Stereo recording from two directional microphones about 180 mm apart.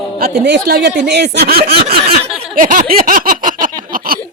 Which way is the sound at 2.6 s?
50° right (ahead or behind).